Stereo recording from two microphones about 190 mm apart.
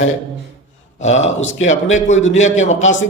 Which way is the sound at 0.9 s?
35° left (ahead or behind).